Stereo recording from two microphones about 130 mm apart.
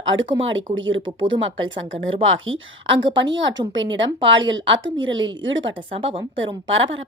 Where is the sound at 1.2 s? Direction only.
40° right (ahead or behind).